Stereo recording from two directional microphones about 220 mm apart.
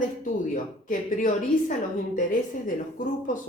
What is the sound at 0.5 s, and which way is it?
A woman's voice, 35° left (ahead or behind).